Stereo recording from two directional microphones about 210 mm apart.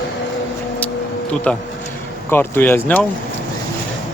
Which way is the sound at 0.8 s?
10° left (ahead or behind).